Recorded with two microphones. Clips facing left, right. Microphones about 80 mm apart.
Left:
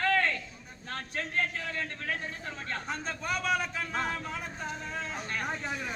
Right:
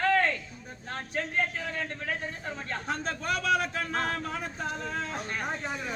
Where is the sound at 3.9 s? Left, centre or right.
Right.